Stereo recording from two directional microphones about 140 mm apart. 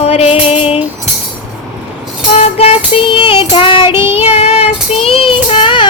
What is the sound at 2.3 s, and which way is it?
Music, 45° left (ahead or behind).